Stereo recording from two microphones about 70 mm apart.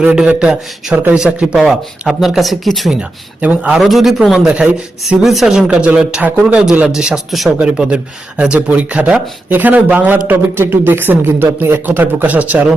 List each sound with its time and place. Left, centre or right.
0.3 s speech: centre
3.4 s a man's voice: right
3.8 s speech: centre
4.4 s speech: centre
5.2 s speech: centre
7.6 s a man's voice: centre